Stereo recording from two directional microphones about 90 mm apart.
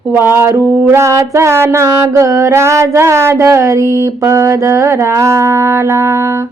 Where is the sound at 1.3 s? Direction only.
30° right (ahead or behind).